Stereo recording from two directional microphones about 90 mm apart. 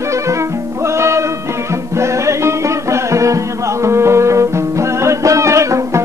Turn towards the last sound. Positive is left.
turn(degrees=-35)  # may be behind; listen again after turning